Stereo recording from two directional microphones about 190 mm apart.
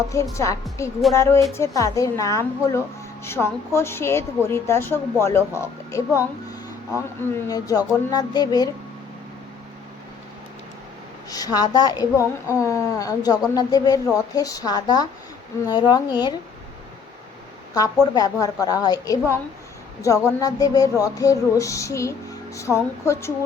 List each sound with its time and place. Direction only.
0.1 s speech: 15° left (ahead or behind)
7.4 s a woman's voice: 20° left (ahead or behind)
11.3 s a woman's voice: 20° left (ahead or behind)
18.0 s a woman's voice: 20° left (ahead or behind)